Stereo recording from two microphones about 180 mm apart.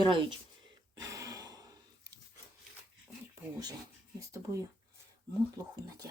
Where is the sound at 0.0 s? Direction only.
25° right (ahead or behind).